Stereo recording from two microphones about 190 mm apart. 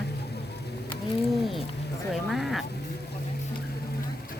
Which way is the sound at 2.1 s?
Centre (ahead or behind).